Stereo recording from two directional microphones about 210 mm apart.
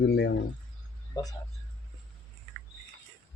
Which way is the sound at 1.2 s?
20° left (ahead or behind).